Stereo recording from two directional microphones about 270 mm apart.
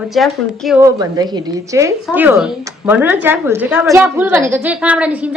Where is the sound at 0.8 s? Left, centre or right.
Centre.